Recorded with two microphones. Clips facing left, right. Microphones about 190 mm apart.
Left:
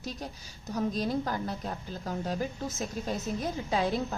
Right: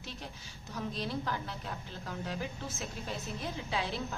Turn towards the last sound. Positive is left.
turn(degrees=45)  # may be behind; listen again after turning